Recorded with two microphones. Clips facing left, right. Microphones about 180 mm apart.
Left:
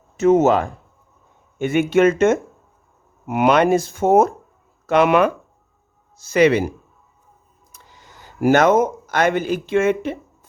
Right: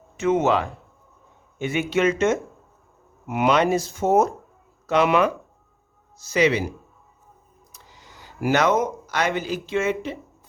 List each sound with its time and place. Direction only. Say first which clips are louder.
0.2 s speech: left 6 dB; 40° left (ahead or behind)